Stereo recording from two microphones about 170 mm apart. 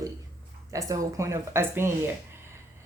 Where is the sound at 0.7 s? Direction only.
20° right (ahead or behind).